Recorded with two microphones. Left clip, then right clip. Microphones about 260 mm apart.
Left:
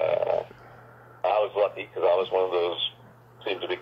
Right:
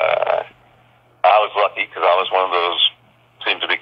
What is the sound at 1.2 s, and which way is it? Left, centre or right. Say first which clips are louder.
Radio: right 10 dB; centre.